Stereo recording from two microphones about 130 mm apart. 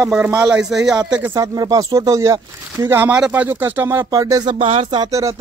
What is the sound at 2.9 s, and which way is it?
Speech, 15° right (ahead or behind).